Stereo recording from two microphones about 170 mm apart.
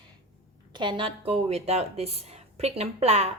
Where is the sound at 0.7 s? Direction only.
30° right (ahead or behind).